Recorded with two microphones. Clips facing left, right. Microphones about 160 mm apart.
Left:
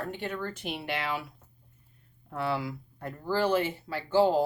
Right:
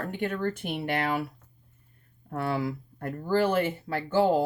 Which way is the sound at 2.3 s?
50° right (ahead or behind).